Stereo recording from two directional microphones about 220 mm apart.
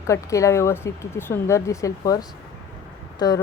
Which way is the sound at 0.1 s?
15° left (ahead or behind).